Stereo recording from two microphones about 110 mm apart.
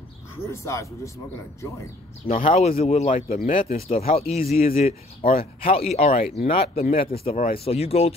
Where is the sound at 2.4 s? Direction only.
65° left (ahead or behind); by 6.3 s 80° left.